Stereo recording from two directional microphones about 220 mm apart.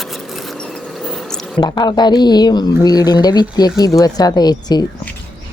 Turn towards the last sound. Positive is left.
turn(degrees=20)  # may be behind; listen again after turning